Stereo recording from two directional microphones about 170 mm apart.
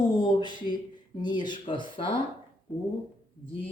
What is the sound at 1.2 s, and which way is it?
Speech, 25° left (ahead or behind).